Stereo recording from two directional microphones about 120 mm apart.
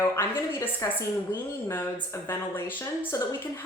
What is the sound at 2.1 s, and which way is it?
A woman's voice, 20° left (ahead or behind).